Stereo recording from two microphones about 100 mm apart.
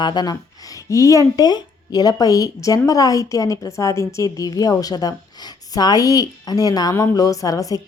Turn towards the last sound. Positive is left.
turn(degrees=35)  # may be behind; listen again after turning